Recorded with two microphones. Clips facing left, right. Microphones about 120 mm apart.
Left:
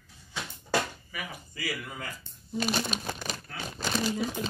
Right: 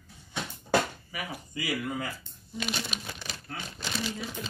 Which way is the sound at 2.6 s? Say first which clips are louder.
Left 5 dB; 40° left (ahead or behind).